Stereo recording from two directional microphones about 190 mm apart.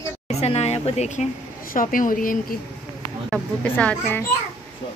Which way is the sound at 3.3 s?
5° left (ahead or behind).